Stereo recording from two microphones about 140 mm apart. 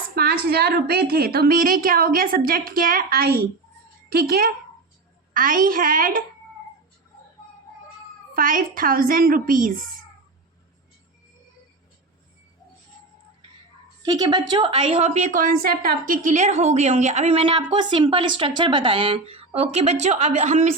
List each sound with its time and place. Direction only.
0.2 s a sound: 90° right
0.9 s a woman's voice: 90° right
8.3 s a woman's voice: 85° right
14.0 s a woman's voice: 30° right (ahead or behind); by 17.4 s 55° right (ahead or behind)
17.4 s a woman's voice: 40° right (ahead or behind); by 20.7 s 55° right (ahead or behind)